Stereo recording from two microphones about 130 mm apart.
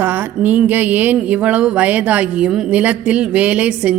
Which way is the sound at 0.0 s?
15° right (ahead or behind).